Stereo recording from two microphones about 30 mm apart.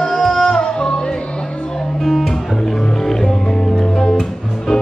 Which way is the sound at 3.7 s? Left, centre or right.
Left.